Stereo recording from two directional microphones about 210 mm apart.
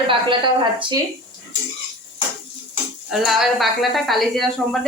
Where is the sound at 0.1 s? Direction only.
25° right (ahead or behind).